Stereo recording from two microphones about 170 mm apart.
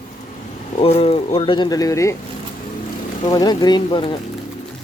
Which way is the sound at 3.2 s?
25° left (ahead or behind).